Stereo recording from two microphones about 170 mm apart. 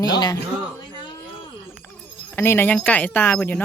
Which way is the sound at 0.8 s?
25° left (ahead or behind).